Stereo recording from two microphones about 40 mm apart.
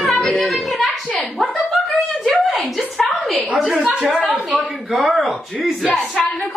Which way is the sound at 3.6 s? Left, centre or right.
Centre.